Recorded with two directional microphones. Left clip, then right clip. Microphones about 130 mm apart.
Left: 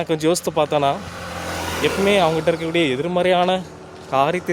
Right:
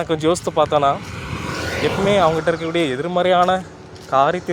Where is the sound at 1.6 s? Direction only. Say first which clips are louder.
Even; 20° left (ahead or behind).